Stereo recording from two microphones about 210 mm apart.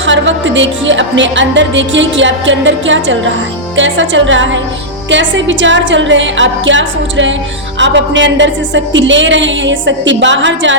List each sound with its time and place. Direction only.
0.0 s music: 60° right (ahead or behind)